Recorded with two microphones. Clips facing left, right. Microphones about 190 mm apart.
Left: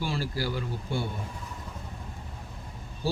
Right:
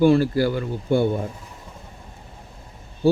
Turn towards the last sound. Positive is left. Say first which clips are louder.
# right 11 dB
turn(degrees=-55)  # may be behind; listen again after turning